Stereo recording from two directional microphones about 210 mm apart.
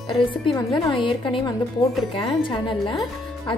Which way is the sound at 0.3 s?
25° left (ahead or behind).